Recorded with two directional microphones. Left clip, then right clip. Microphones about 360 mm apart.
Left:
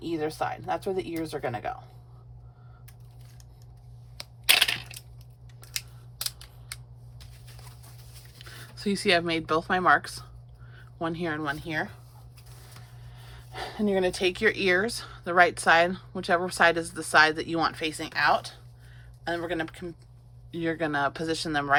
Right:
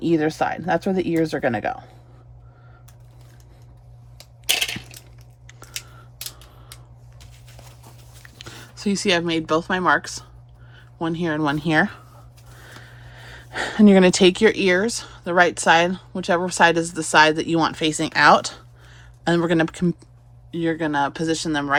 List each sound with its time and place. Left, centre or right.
0.0 s speech: right
8.4 s speech: centre
13.1 s gasp: right
14.1 s speech: centre
20.5 s speech: centre